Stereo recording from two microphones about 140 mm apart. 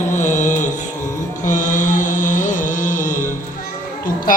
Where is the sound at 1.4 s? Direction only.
65° left (ahead or behind).